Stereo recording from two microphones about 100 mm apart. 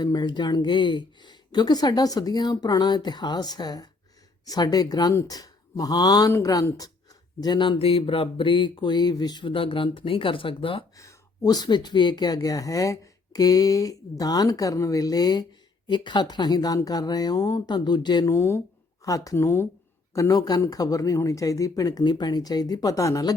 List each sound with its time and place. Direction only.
0.0 s speech: 45° left (ahead or behind)
7.4 s speech: 50° left (ahead or behind)
7.8 s speech: 75° left (ahead or behind)
10.9 s speech: 40° left (ahead or behind)
18.3 s speech: 30° left (ahead or behind)